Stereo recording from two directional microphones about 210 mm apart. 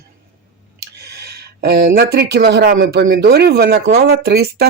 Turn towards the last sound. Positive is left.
turn(degrees=-50)  # may be behind; listen again after turning